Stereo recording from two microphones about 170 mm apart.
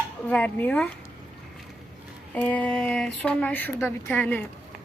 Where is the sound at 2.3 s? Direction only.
5° left (ahead or behind).